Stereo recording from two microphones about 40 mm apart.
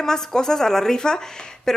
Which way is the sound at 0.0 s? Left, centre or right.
Centre.